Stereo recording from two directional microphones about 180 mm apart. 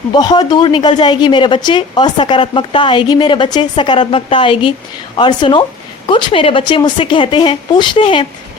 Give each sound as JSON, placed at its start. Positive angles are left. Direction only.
{"t": 0.1, "sound": "a woman's voice", "side_deg": 20}